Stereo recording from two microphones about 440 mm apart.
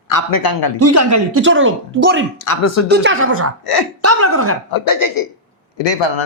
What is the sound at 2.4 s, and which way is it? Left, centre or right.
Speech, left.